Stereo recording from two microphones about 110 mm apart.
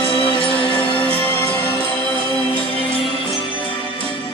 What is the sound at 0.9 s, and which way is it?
Music, 15° left (ahead or behind).